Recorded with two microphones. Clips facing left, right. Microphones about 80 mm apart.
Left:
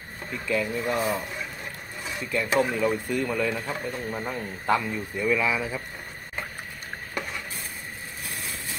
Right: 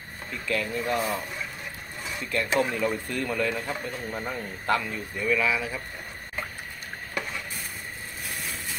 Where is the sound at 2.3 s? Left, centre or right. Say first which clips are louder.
Left 1 dB; centre.